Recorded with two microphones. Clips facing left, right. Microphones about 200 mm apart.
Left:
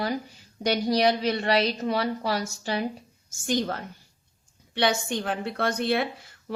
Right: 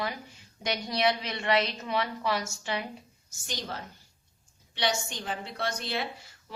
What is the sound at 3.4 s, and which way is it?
A woman's voice, 55° left (ahead or behind).